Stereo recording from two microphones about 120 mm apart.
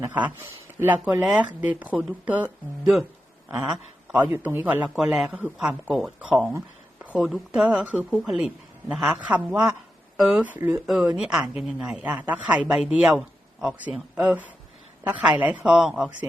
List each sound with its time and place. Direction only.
0.0 s a woman's voice: 15° right (ahead or behind)
3.5 s a woman's voice: 10° right (ahead or behind)
7.0 s a sound: 10° right (ahead or behind)
7.3 s a woman's voice: centre (ahead or behind)
10.8 s a woman's voice: 5° right (ahead or behind)